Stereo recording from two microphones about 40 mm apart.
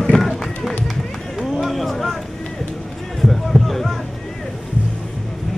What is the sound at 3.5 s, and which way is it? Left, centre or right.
Music, centre.